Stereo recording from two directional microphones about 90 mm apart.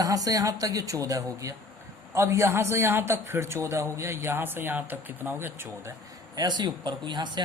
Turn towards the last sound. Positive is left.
turn(degrees=-55)  # may be behind; listen again after turning